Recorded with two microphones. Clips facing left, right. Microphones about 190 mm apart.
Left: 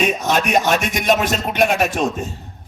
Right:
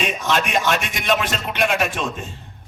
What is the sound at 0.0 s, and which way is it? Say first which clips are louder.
A man's voice: left 4 dB; 45° left (ahead or behind).